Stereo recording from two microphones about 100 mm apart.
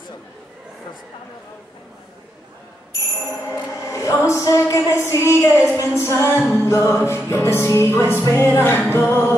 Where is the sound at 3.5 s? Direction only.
30° left (ahead or behind).